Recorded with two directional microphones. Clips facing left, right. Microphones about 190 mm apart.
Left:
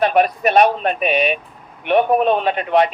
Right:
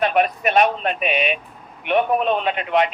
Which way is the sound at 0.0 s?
40° left (ahead or behind).